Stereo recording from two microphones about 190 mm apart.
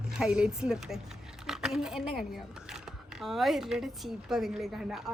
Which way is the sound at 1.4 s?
5° right (ahead or behind).